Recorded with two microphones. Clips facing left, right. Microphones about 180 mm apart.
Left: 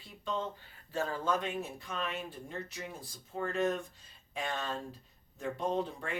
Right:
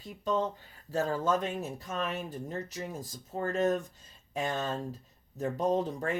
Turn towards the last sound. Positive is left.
turn(degrees=-40)  # may be behind; listen again after turning